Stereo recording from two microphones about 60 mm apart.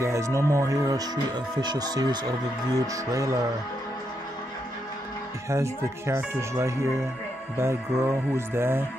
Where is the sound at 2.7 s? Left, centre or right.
Right.